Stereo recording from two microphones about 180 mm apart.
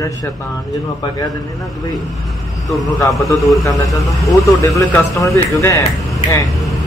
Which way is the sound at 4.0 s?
20° left (ahead or behind).